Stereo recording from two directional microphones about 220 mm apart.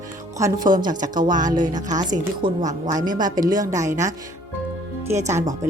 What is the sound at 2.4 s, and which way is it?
A woman's voice, 20° right (ahead or behind).